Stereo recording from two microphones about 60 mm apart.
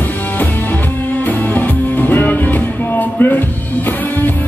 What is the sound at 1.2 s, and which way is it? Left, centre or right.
Music, left.